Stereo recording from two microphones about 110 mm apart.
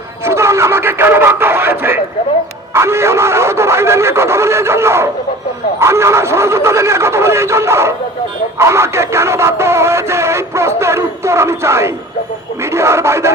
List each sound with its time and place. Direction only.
0.3 s radio: 25° right (ahead or behind)
2.7 s music: 25° right (ahead or behind)